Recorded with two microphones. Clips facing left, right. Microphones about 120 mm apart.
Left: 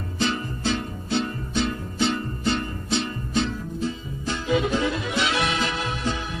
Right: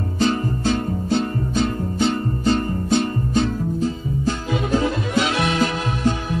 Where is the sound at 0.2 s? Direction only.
45° right (ahead or behind).